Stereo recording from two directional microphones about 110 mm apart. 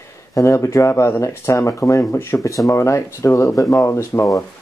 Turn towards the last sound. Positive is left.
turn(degrees=25)  # may be behind; listen again after turning